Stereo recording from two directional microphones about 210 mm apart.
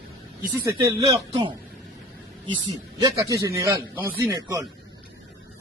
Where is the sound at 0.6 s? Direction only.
15° right (ahead or behind).